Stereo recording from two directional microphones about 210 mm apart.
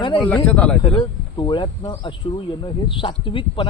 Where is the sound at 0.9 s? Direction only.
25° left (ahead or behind).